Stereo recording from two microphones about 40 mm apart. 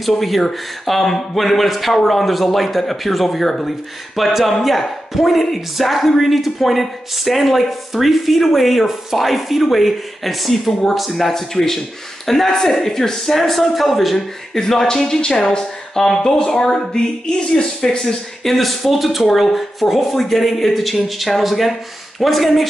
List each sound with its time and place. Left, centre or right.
0.0 s speech: centre
18.4 s speech: centre